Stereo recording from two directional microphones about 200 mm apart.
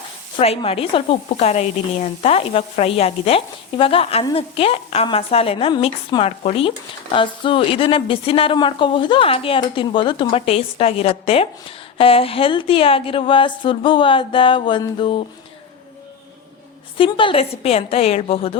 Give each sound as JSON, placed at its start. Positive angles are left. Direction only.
{"t": 0.3, "sound": "speech", "side_deg": 30}
{"t": 17.0, "sound": "speech", "side_deg": 25}